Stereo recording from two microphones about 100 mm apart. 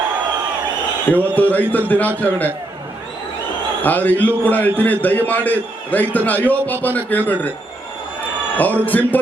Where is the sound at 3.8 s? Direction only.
15° left (ahead or behind).